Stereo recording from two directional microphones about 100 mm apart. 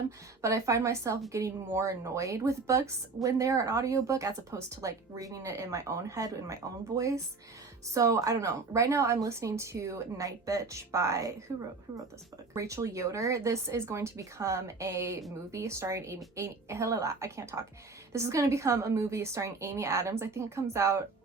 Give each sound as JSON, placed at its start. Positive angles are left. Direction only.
{"t": 0.4, "sound": "speech", "side_deg": -30}
{"t": 12.5, "sound": "a woman's voice", "side_deg": -30}